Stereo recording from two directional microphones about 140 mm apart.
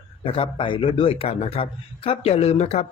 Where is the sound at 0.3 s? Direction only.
40° left (ahead or behind).